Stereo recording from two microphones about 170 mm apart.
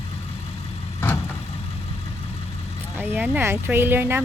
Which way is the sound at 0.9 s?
15° left (ahead or behind).